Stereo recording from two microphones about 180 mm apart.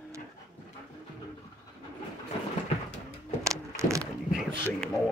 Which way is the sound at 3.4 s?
15° right (ahead or behind).